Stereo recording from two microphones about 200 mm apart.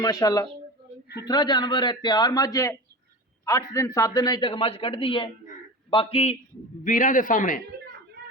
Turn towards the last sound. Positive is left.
turn(degrees=40)  # may be behind; listen again after turning